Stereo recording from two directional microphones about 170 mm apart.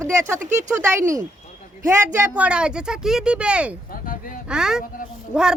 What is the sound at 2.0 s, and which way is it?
Speech, 15° right (ahead or behind).